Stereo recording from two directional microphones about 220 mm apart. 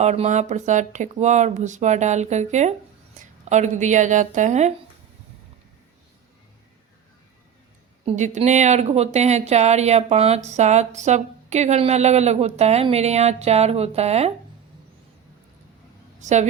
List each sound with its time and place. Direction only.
0.0 s speech: 30° right (ahead or behind)
8.0 s speech: 35° right (ahead or behind)
16.2 s a woman's voice: 30° right (ahead or behind)